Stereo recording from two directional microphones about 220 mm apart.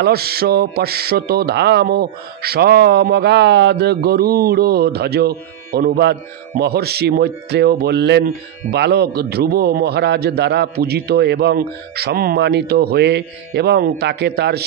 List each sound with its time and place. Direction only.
0.0 s a man's voice: 45° right (ahead or behind)